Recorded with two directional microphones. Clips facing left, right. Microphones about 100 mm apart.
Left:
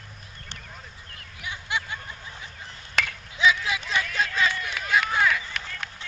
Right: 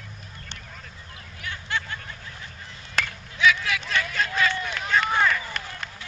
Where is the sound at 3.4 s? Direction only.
20° left (ahead or behind).